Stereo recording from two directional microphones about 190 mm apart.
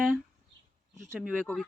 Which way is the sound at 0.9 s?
15° right (ahead or behind).